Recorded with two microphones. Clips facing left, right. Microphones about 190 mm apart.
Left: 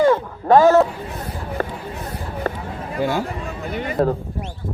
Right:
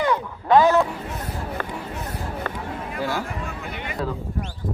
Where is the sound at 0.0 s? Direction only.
45° left (ahead or behind).